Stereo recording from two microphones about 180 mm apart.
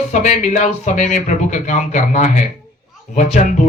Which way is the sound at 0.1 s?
40° left (ahead or behind).